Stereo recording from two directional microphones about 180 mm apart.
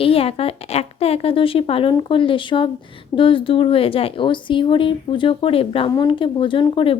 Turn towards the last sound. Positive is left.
turn(degrees=30)  # may be behind; listen again after turning